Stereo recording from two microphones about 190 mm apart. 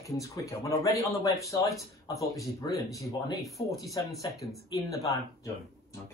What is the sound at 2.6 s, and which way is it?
Speech, 20° left (ahead or behind).